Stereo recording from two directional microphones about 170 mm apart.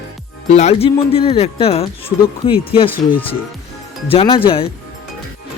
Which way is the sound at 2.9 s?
10° left (ahead or behind).